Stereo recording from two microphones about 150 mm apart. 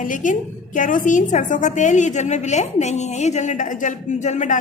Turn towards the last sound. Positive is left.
turn(degrees=55)  # may be behind; listen again after turning